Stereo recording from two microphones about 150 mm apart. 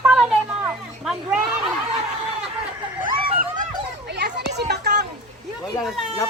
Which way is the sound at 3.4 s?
60° right (ahead or behind).